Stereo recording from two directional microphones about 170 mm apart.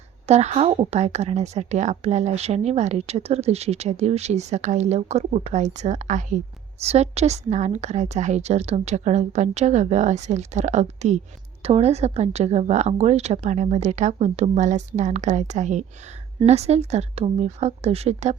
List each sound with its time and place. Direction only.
0.3 s speech: 40° right (ahead or behind)